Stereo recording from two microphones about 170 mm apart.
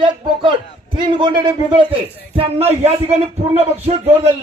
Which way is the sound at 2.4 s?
35° right (ahead or behind).